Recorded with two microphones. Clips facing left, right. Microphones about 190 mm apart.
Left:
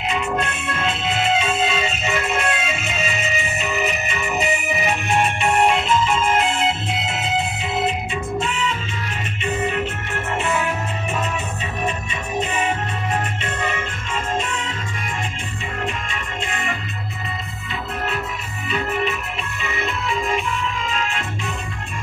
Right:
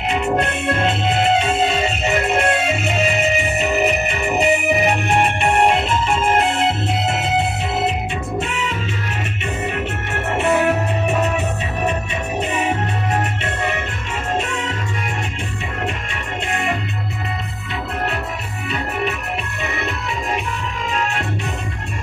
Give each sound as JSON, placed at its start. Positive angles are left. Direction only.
{"t": 0.4, "sound": "music", "side_deg": -60}
{"t": 10.3, "sound": "music", "side_deg": -65}
{"t": 14.3, "sound": "music", "side_deg": -65}